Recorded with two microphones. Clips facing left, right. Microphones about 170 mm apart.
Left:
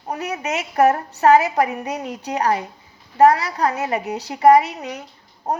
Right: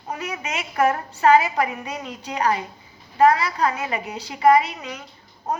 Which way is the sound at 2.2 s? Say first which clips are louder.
Left 2 dB; 70° left (ahead or behind).